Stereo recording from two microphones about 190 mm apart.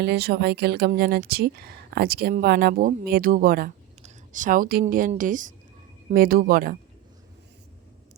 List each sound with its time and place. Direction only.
0.0 s speech: 60° right (ahead or behind)